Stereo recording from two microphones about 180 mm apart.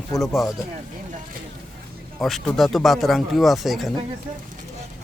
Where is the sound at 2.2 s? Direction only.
Centre (ahead or behind).